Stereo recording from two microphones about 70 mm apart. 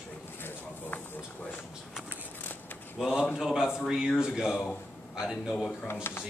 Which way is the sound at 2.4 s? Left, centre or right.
Left.